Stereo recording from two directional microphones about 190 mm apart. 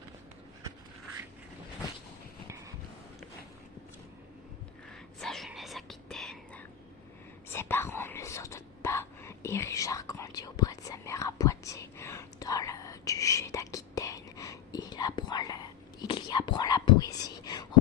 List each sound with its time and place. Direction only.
4.9 s whispering: centre (ahead or behind); by 17.7 s 20° left (ahead or behind)